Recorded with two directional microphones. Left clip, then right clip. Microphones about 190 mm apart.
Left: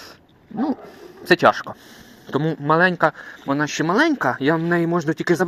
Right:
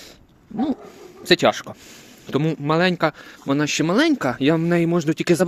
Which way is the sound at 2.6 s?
25° right (ahead or behind).